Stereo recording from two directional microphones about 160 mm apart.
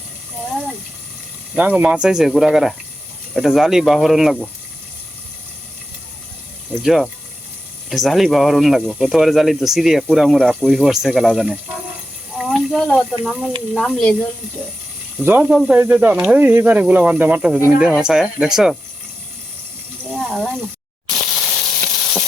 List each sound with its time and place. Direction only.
1.5 s speech: 5° right (ahead or behind)
6.8 s speech: centre (ahead or behind)
12.4 s water: centre (ahead or behind)
13.7 s speech: 5° left (ahead or behind)
15.2 s speech: 10° right (ahead or behind)
20.1 s a sound: 5° left (ahead or behind)
21.8 s sizzle: centre (ahead or behind)